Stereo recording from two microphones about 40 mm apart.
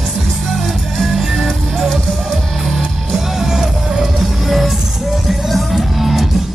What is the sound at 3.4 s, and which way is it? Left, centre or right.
Music, centre.